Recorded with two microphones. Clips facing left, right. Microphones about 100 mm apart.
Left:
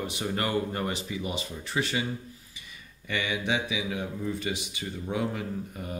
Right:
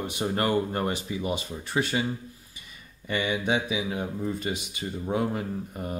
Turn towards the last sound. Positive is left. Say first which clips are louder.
# right 2 dB
turn(degrees=-40)  # may be behind; listen again after turning